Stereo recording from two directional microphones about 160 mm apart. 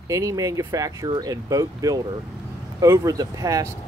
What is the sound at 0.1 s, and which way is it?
Speech, 20° right (ahead or behind).